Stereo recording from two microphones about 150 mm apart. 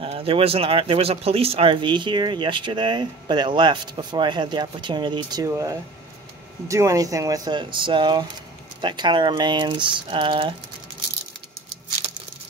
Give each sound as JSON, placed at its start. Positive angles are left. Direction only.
{"t": 0.0, "sound": "speech", "side_deg": -40}